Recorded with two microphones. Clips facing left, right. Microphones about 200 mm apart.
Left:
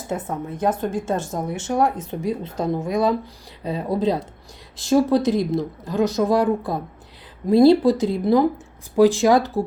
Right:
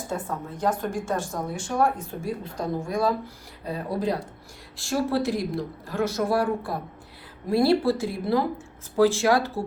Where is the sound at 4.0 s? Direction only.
20° left (ahead or behind).